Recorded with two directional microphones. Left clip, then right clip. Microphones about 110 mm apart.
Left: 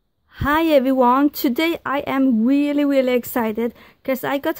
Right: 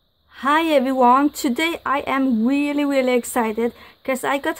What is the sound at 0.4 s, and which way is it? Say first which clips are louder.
Speech: left 1 dB; 60° left (ahead or behind).